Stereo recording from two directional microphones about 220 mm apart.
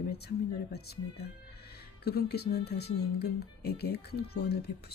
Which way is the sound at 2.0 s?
45° left (ahead or behind).